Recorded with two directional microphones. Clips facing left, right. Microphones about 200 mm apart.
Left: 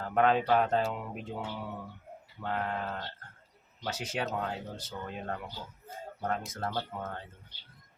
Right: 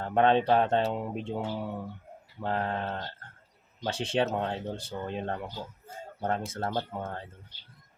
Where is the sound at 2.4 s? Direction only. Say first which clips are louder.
Right 3 dB; 30° right (ahead or behind).